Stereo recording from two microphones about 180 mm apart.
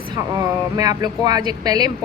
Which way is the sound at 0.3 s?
20° right (ahead or behind).